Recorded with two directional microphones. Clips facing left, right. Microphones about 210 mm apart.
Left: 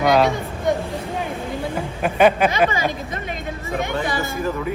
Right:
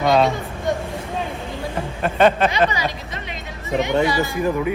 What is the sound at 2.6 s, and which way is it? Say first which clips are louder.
Vehicle: left 2 dB; 50° left (ahead or behind).